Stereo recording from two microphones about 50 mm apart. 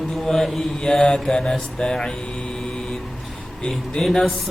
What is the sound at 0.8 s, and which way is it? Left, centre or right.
Mantra, centre.